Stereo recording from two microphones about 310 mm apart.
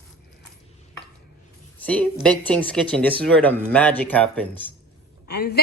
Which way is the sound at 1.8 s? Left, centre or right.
Centre.